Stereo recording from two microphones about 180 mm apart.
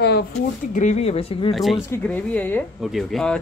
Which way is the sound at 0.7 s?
40° left (ahead or behind).